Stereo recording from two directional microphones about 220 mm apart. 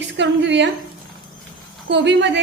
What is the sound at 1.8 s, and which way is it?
Speech, 55° right (ahead or behind).